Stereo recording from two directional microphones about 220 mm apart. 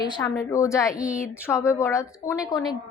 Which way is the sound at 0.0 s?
20° left (ahead or behind).